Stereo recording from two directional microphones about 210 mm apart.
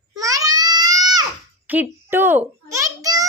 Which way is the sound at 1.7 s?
10° right (ahead or behind).